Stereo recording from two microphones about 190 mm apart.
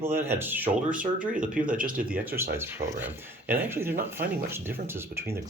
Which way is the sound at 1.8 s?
50° right (ahead or behind).